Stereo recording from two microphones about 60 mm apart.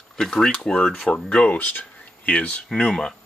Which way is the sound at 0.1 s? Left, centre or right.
Centre.